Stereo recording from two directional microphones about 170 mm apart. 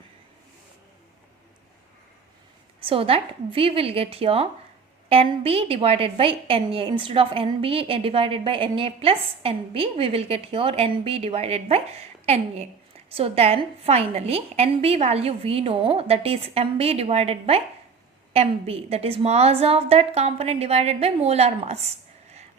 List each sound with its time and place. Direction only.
2.8 s a woman's voice: 35° right (ahead or behind)